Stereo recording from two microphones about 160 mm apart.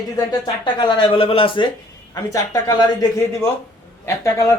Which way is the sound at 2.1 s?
20° left (ahead or behind).